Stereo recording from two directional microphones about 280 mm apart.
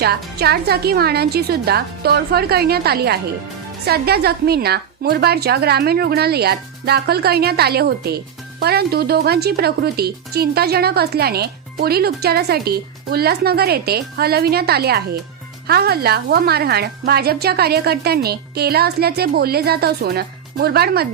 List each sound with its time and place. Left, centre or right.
0.0 s a woman's voice: right